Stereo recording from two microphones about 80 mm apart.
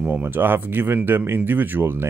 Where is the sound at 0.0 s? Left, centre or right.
Right.